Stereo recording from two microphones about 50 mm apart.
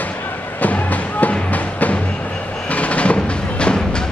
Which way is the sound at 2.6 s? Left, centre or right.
Left.